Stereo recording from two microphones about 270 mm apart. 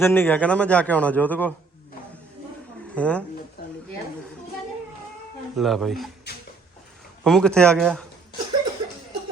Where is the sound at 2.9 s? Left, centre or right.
Centre.